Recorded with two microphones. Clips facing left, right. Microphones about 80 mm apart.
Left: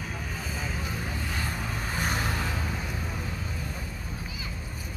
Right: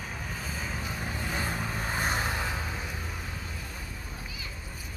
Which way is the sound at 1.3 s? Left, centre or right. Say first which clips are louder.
Right 1 dB; right.